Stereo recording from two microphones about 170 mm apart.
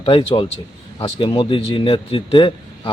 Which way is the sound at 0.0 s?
30° left (ahead or behind).